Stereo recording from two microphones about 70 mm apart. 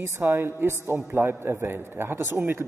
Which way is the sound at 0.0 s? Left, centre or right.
Right.